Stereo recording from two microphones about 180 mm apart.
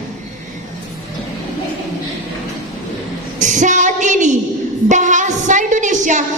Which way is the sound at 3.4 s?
45° right (ahead or behind).